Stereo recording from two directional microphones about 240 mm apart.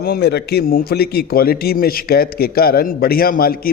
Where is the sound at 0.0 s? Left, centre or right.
Left.